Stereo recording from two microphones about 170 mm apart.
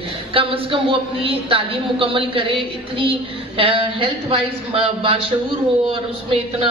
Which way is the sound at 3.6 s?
30° right (ahead or behind).